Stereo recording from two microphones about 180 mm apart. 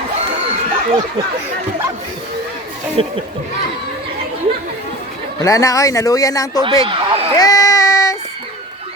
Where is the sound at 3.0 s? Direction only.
30° right (ahead or behind).